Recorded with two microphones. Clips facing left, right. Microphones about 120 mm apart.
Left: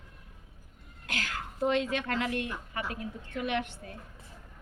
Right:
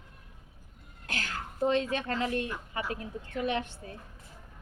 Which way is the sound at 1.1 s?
35° right (ahead or behind).